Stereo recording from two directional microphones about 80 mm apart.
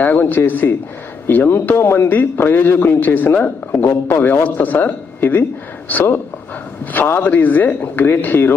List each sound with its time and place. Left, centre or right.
0.0 s speech: left